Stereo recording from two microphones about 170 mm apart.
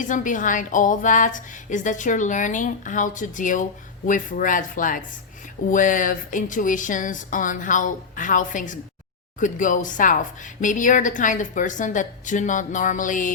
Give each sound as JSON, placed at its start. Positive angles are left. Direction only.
{"t": 0.0, "sound": "a woman's voice", "side_deg": 50}